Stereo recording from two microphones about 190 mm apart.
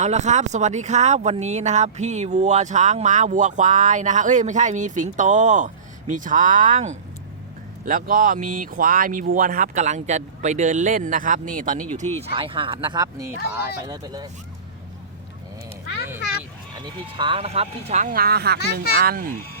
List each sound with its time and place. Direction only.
0.0 s speech: 35° right (ahead or behind)
12.2 s speech: 30° right (ahead or behind)
17.2 s speech: 30° right (ahead or behind); by 19.3 s 50° right (ahead or behind)